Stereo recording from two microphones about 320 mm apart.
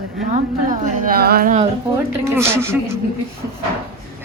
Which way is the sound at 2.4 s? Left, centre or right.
Centre.